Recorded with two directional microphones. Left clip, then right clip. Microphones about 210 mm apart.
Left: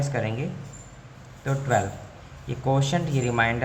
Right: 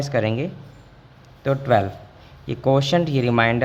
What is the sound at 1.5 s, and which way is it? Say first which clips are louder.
A man's voice: right 6 dB; 45° right (ahead or behind).